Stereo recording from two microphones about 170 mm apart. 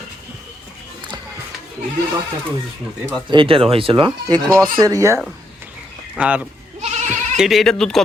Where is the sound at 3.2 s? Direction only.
30° right (ahead or behind).